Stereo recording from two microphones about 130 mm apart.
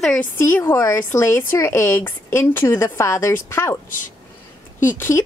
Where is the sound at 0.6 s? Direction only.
25° left (ahead or behind).